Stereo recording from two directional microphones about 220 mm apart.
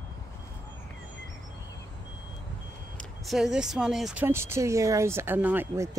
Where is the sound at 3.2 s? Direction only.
Centre (ahead or behind).